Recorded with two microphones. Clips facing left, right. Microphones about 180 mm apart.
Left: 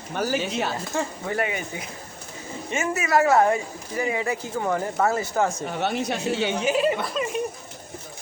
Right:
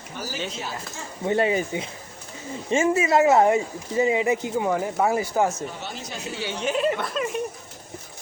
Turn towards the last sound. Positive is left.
turn(degrees=0)  # may be behind; listen again after turning